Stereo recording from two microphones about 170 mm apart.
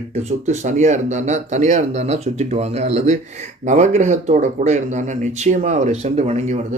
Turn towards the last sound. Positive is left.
turn(degrees=-45)  # may be behind; listen again after turning